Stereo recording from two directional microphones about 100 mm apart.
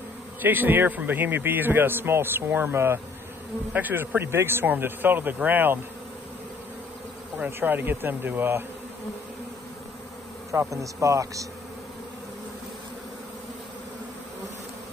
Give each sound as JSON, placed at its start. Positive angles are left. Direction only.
{"t": 0.4, "sound": "a man's voice", "side_deg": -20}
{"t": 7.3, "sound": "a man's voice", "side_deg": -20}
{"t": 10.5, "sound": "speech", "side_deg": -30}